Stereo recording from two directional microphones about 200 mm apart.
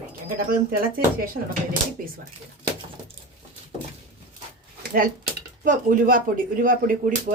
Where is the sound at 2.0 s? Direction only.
45° right (ahead or behind).